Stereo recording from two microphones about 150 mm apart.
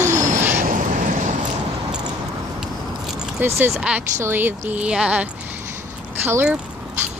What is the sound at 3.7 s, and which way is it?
Speech, 5° right (ahead or behind).